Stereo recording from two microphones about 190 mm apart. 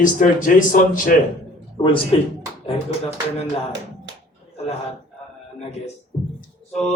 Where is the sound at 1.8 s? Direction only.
25° left (ahead or behind).